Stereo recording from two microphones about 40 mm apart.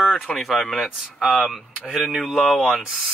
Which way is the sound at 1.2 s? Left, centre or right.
Left.